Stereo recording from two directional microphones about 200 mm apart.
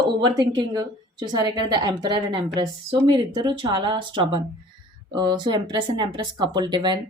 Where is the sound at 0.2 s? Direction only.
20° right (ahead or behind).